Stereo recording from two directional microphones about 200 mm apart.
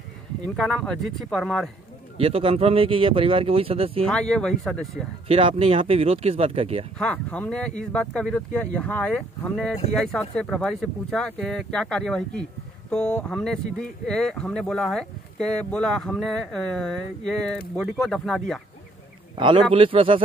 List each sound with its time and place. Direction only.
0.6 s speech: centre (ahead or behind)
2.1 s speech: 25° right (ahead or behind)
4.0 s speech: 5° left (ahead or behind)
5.3 s speech: 25° right (ahead or behind)
7.0 s speech: 5° left (ahead or behind)
19.3 s a man's voice: 25° right (ahead or behind)